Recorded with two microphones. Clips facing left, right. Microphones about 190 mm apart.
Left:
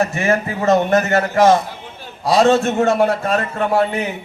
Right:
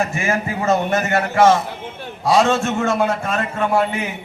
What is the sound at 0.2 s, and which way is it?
A man's voice, 40° left (ahead or behind).